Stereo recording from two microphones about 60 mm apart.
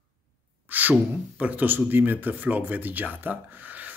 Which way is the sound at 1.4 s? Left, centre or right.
Right.